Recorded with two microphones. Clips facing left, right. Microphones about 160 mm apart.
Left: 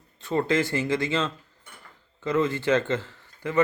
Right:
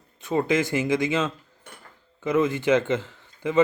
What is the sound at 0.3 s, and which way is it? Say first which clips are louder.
A man's voice: right 1 dB; 15° right (ahead or behind).